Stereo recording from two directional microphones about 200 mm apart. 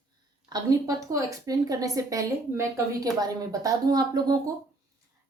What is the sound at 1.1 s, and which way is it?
A woman's voice, 20° right (ahead or behind).